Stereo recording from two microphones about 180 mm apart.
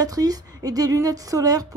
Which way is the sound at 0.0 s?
20° right (ahead or behind).